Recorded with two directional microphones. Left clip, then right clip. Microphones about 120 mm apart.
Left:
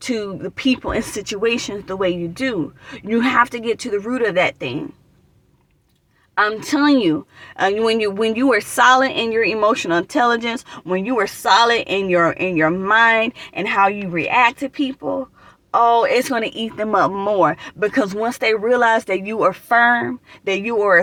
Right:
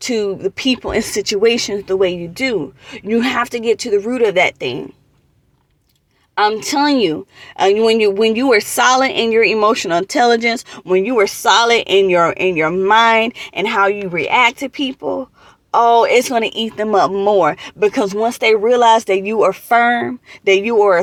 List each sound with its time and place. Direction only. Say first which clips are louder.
0.0 s speech: right 6 dB; 15° right (ahead or behind)
6.3 s speech: right 3 dB; 20° right (ahead or behind)